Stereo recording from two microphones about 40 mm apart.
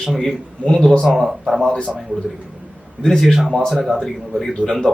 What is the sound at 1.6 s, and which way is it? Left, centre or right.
Speech, left.